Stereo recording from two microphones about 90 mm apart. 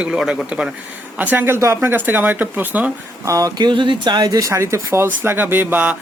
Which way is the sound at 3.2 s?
40° right (ahead or behind).